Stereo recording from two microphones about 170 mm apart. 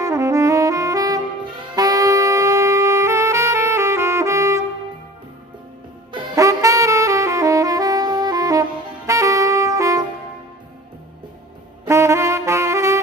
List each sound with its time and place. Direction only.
0.0 s saxophone: 20° right (ahead or behind)
1.8 s music: 20° right (ahead or behind)
6.1 s saxophone: 20° right (ahead or behind)
11.9 s brass instrument: 15° right (ahead or behind)